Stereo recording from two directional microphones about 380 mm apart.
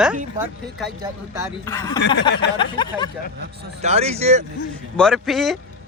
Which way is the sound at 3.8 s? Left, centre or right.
Centre.